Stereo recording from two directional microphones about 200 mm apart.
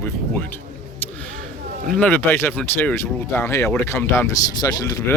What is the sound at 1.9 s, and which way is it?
Speech, 10° left (ahead or behind).